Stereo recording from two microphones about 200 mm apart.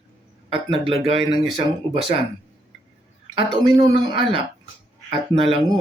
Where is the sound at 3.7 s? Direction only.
20° right (ahead or behind).